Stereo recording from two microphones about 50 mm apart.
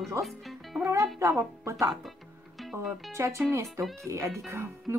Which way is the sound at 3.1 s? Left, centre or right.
Right.